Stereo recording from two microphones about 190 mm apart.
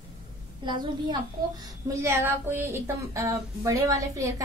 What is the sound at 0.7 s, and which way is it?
A woman's voice, 25° right (ahead or behind).